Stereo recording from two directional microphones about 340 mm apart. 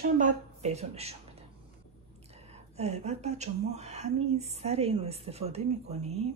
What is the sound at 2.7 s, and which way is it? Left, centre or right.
Speech, centre.